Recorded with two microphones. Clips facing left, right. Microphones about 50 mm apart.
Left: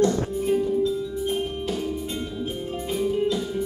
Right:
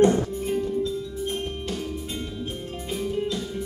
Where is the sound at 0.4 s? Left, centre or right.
Centre.